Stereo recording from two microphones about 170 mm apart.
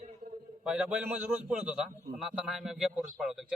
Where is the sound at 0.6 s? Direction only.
5° right (ahead or behind).